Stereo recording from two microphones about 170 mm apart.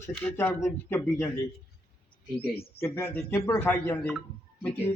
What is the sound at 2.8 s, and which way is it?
A man's voice, 15° left (ahead or behind).